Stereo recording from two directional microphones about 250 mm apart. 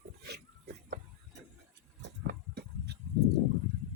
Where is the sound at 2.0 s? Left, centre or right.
Right.